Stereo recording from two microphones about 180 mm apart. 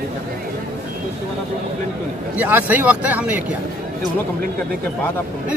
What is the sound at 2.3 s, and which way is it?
Speech, 10° right (ahead or behind).